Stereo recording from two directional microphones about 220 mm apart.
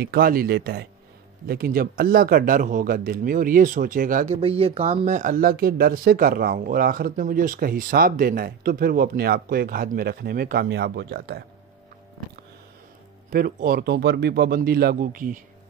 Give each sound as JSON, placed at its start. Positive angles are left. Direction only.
{"t": 0.0, "sound": "speech", "side_deg": -45}
{"t": 13.3, "sound": "speech", "side_deg": -40}